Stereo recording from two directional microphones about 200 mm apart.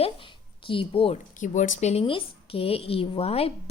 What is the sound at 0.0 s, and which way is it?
A woman's voice, 25° left (ahead or behind).